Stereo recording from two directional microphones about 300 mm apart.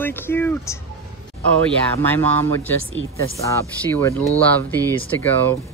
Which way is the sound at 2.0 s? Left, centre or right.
Centre.